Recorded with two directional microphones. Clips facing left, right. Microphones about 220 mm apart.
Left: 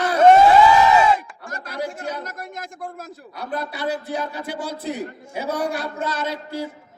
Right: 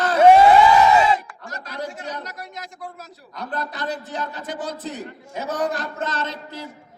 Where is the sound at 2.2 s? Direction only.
50° left (ahead or behind).